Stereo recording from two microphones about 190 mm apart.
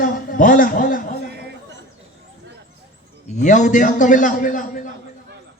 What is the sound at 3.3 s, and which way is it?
A man's voice, 40° left (ahead or behind).